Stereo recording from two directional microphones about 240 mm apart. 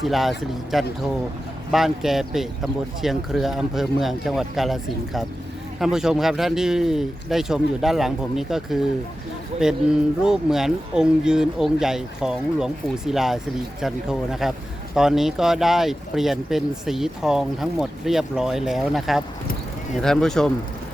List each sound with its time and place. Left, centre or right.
0.0 s speech: centre